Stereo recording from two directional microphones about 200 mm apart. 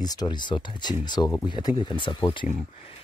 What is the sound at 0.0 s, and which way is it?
Speech, 20° left (ahead or behind).